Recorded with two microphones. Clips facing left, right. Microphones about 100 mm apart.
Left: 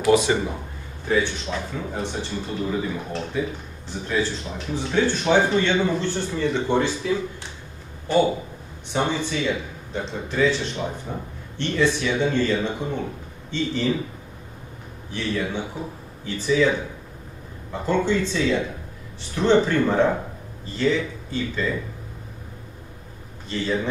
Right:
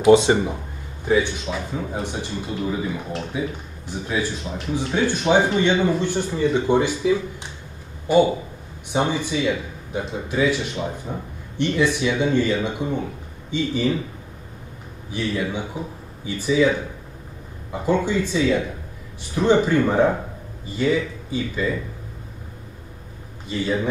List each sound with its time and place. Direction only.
0.0 s a man's voice: 25° right (ahead or behind)
15.0 s a man's voice: 15° right (ahead or behind)
23.5 s a man's voice: 10° right (ahead or behind)